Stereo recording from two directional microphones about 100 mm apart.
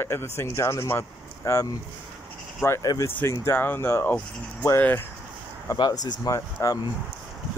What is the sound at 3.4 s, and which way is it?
Speech, 20° left (ahead or behind).